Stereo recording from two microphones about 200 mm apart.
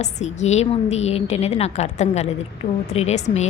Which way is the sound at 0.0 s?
35° left (ahead or behind).